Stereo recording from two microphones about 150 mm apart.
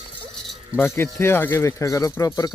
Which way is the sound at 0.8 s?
15° left (ahead or behind).